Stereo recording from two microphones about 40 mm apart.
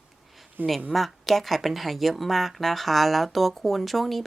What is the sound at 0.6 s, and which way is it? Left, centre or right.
Speech, right.